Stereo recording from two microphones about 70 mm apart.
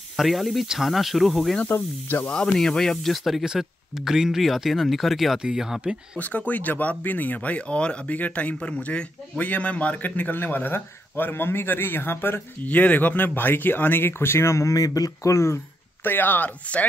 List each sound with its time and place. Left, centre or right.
0.2 s speech: centre
1.7 s speech: left
2.2 s speech: centre
6.1 s a man's voice: left
16.0 s a man's voice: left